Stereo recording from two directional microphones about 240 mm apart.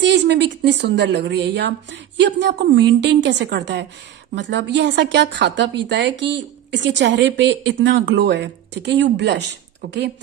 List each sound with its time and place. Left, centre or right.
0.0 s a woman's voice: right